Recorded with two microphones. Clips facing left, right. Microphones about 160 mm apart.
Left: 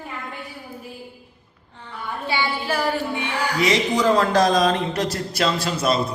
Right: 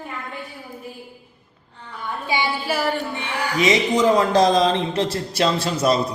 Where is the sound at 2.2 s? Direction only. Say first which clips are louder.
Right 1 dB; 15° right (ahead or behind).